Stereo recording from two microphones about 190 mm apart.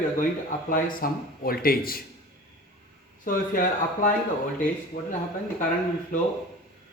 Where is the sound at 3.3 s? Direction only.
45° left (ahead or behind).